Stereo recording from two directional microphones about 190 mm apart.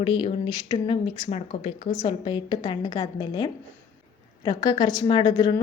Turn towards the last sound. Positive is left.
turn(degrees=25)  # may be behind; listen again after turning